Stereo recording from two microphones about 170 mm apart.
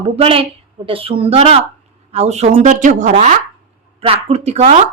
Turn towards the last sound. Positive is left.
turn(degrees=-40)  # may be behind; listen again after turning